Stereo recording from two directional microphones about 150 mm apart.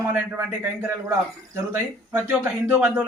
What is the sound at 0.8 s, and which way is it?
Speech, 20° right (ahead or behind).